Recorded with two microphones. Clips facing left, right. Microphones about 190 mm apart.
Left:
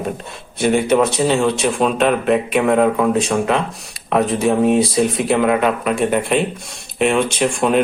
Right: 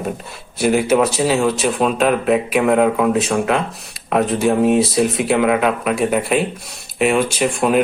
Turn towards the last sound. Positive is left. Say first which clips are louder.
# even
turn(degrees=0)  # may be behind; listen again after turning